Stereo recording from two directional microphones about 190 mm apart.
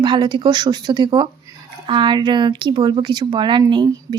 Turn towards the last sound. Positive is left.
turn(degrees=-25)  # may be behind; listen again after turning